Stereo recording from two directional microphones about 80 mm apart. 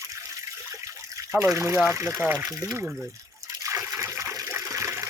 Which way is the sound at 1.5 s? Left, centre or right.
Right.